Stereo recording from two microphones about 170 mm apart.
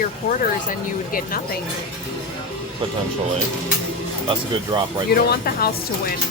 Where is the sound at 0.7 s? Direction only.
55° left (ahead or behind).